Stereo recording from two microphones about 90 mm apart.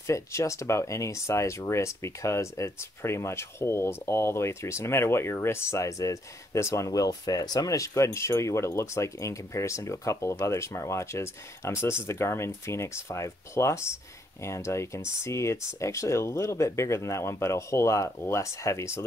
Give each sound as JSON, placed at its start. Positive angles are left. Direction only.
{"t": 0.0, "sound": "speech", "side_deg": 35}